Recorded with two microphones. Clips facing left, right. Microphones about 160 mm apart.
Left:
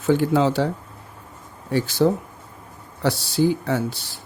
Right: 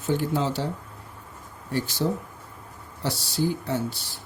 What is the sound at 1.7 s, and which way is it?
Speech, 90° left.